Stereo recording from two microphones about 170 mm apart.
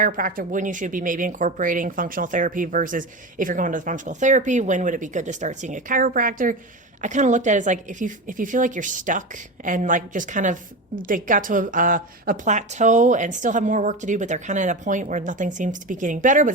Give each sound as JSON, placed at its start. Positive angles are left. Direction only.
{"t": 0.0, "sound": "a woman's voice", "side_deg": -55}